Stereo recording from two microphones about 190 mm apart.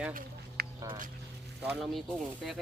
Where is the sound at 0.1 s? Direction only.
50° right (ahead or behind).